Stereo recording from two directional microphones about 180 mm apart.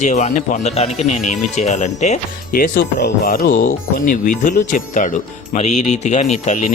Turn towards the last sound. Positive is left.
turn(degrees=40)  # may be behind; listen again after turning